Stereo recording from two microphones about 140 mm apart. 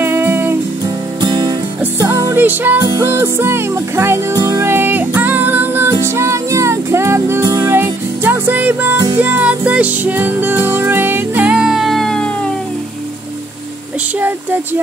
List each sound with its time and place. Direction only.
0.0 s music: 15° right (ahead or behind)
1.2 s music: 30° right (ahead or behind)
2.4 s speech: 15° right (ahead or behind)
3.0 s music: 20° right (ahead or behind); by 12.3 s 5° left (ahead or behind)
14.2 s speech: 15° right (ahead or behind)